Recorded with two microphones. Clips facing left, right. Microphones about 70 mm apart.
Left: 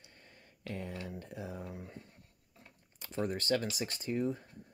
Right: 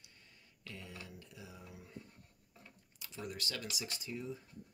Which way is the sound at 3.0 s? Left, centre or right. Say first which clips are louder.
Left 9 dB; left.